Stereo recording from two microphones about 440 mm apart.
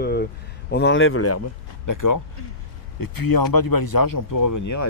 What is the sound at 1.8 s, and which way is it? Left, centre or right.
Speech, left.